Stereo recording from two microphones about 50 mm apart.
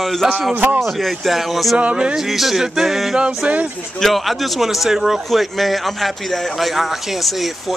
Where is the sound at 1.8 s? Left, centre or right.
Right.